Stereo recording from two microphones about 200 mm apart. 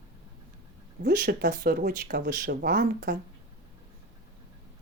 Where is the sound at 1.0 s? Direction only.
50° right (ahead or behind).